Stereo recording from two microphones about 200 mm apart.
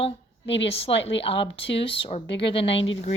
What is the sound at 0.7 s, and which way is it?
Speech, 30° left (ahead or behind).